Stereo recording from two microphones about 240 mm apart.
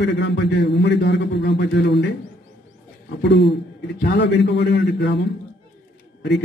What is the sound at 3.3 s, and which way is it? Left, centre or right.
A man's voice, left.